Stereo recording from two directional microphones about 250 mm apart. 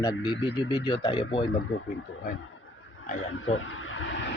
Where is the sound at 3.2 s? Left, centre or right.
Left.